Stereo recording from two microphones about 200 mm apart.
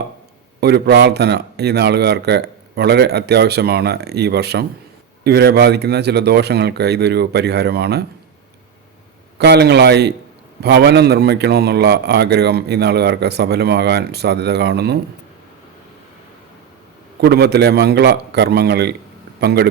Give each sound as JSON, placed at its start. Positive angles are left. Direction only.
{"t": 0.6, "sound": "a man's voice", "side_deg": -55}
{"t": 9.4, "sound": "a man's voice", "side_deg": -55}
{"t": 17.2, "sound": "a man's voice", "side_deg": -55}